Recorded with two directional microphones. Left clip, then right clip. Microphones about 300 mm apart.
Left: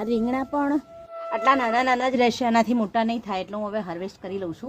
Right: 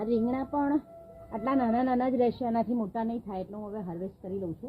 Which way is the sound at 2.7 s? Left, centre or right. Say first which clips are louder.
Left 9 dB; left.